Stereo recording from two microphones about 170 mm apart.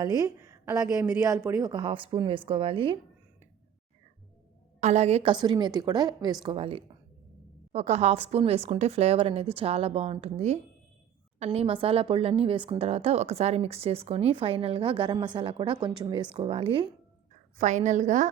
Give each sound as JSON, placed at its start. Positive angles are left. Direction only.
{"t": 0.0, "sound": "a woman's voice", "side_deg": -20}
{"t": 4.8, "sound": "a woman's voice", "side_deg": -40}
{"t": 17.6, "sound": "a woman's voice", "side_deg": -45}